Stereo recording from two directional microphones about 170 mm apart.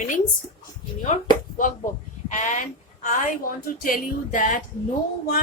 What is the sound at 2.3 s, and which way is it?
A woman's voice, 50° left (ahead or behind).